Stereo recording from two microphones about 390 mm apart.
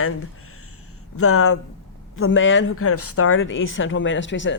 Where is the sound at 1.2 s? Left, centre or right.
Left.